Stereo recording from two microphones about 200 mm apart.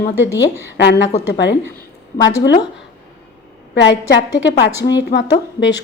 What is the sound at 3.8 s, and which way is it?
Speech, 60° left (ahead or behind).